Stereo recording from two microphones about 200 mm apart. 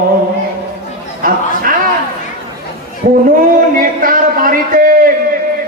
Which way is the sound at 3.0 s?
40° right (ahead or behind).